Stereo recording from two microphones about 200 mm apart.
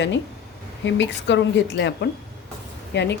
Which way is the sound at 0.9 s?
65° left (ahead or behind).